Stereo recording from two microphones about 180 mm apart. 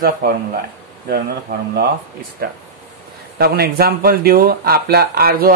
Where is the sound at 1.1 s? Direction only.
60° right (ahead or behind).